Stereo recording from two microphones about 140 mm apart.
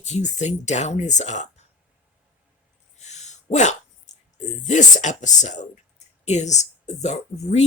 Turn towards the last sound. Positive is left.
turn(degrees=55)  # may be behind; listen again after turning